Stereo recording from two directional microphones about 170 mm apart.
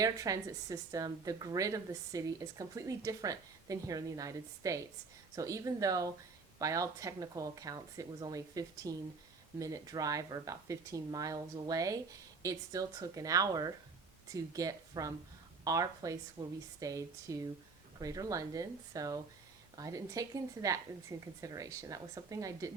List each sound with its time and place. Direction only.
0.0 s a woman's voice: 20° right (ahead or behind)